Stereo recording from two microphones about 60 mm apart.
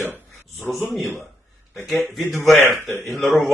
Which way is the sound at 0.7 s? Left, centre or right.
Centre.